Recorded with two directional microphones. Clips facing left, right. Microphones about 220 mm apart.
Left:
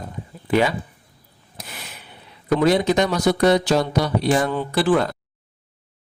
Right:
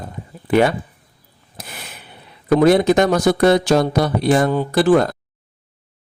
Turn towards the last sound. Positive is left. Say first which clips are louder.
# right 5 dB
turn(degrees=-45)  # may be behind; listen again after turning